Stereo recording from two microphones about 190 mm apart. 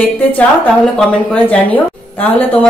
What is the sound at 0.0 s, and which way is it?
Speech, 10° left (ahead or behind).